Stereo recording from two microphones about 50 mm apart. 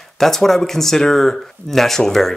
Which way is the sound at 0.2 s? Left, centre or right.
Centre.